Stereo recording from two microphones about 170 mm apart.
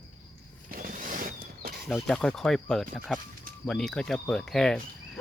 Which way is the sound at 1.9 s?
Centre (ahead or behind).